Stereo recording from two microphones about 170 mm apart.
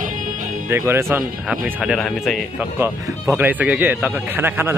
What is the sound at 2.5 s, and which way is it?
Speech, 15° right (ahead or behind).